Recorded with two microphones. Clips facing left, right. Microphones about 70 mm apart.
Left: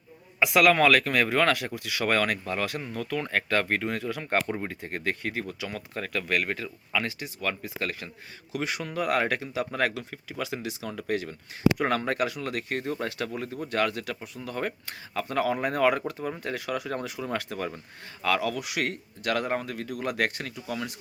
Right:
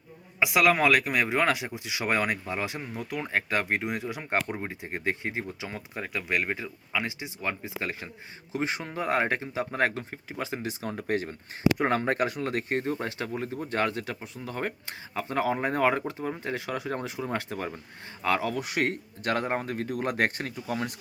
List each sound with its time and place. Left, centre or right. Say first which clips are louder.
0.3 s speech: left 2 dB; centre; by 20.9 s right